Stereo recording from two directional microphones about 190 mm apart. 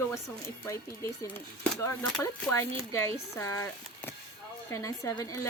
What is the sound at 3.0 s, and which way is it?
A woman's voice, 15° left (ahead or behind).